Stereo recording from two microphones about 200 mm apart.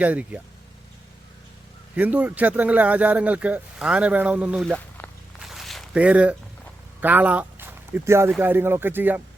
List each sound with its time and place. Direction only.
0.0 s speech: 5° right (ahead or behind)
2.0 s speech: 5° right (ahead or behind)